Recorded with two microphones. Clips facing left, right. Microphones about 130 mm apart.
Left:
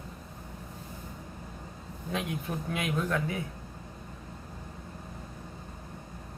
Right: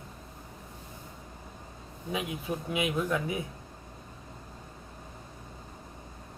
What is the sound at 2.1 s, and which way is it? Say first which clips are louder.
Speech: even; 5° right (ahead or behind).